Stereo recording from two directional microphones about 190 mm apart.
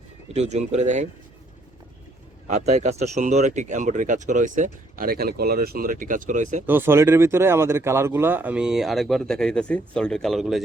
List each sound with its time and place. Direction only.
0.3 s speech: 35° right (ahead or behind)
2.5 s speech: 35° right (ahead or behind)
6.7 s speech: 10° right (ahead or behind)